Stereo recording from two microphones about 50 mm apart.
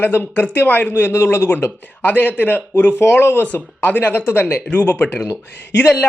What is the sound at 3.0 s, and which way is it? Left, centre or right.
Speech, left.